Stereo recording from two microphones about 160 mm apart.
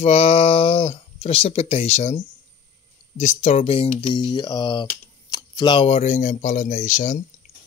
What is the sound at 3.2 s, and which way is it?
Speech, 45° left (ahead or behind).